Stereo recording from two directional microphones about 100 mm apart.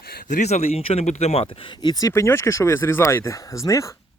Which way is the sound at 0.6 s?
80° left.